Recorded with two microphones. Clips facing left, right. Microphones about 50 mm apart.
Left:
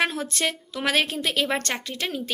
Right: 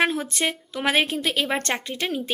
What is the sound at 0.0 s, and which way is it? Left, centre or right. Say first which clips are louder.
A woman's voice: right 2 dB; right.